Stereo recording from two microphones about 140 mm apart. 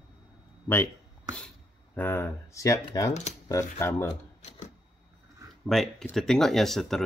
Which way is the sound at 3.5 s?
20° left (ahead or behind).